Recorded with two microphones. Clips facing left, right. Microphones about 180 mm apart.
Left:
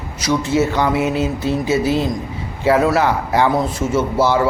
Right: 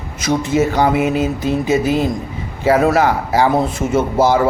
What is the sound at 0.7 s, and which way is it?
Speech, 40° right (ahead or behind).